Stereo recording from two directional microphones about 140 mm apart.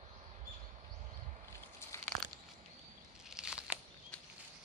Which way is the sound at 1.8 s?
20° left (ahead or behind).